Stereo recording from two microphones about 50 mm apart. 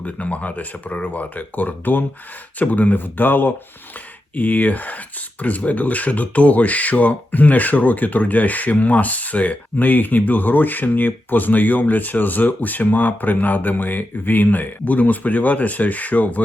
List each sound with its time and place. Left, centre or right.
0.0 s speech: left